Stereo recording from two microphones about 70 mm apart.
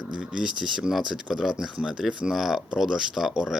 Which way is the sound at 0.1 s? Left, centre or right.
Centre.